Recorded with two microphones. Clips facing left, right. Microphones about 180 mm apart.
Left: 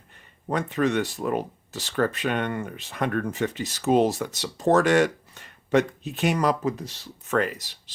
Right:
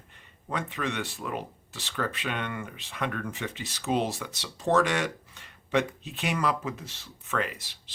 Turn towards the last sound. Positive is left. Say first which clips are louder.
# left 6 dB
turn(degrees=40)  # may be behind; listen again after turning